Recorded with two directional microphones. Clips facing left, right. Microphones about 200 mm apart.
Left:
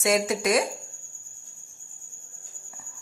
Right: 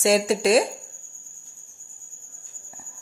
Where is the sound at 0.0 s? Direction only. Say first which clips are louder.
Right 4 dB; 30° right (ahead or behind).